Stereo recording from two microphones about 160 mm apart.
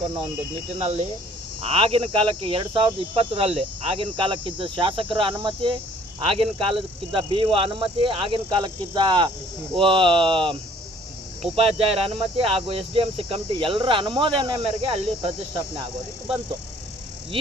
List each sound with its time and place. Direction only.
0.8 s speech: 40° right (ahead or behind)